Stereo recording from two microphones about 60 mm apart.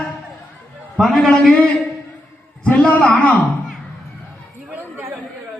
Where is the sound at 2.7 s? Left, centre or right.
Left.